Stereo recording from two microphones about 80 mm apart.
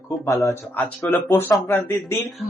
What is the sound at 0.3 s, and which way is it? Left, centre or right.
Speech, left.